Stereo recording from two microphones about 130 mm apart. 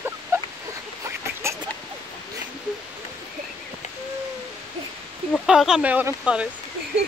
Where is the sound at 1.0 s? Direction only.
20° right (ahead or behind).